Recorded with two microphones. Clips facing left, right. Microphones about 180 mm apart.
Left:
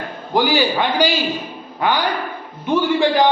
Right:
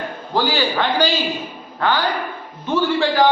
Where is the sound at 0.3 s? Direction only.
15° left (ahead or behind).